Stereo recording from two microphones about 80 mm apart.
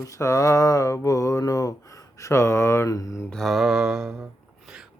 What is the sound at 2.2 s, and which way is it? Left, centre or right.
Mantra, left.